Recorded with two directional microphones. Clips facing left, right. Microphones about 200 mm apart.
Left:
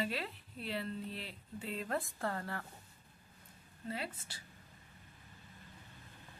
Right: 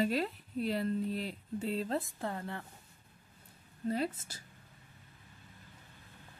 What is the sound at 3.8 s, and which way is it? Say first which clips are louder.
Speech: right 9 dB; 40° right (ahead or behind).